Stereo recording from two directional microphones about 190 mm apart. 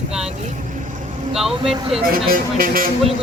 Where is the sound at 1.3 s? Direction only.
Centre (ahead or behind).